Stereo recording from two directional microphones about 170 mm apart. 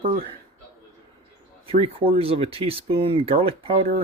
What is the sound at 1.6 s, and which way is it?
Speech, 35° right (ahead or behind).